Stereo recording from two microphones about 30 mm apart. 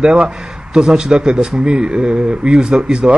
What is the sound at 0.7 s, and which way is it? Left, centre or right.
Speech, right.